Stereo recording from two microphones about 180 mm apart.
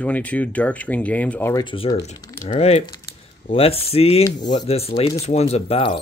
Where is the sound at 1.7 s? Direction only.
30° left (ahead or behind).